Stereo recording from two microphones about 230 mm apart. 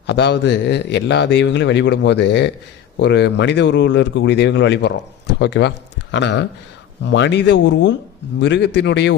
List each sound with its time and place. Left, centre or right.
0.1 s a man's voice: left